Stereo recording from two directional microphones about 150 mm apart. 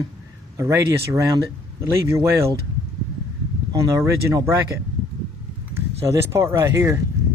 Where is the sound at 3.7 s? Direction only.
20° right (ahead or behind).